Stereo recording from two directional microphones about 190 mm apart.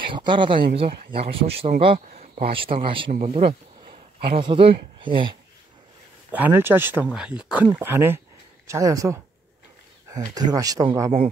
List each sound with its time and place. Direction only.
0.1 s speech: 25° right (ahead or behind)
6.3 s speech: 10° right (ahead or behind)